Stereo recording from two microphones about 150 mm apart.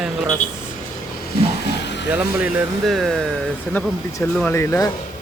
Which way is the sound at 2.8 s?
Centre (ahead or behind).